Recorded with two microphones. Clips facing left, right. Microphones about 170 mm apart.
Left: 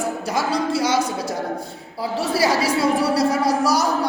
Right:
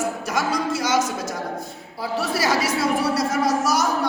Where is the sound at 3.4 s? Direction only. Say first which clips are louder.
Left 2 dB; 30° left (ahead or behind).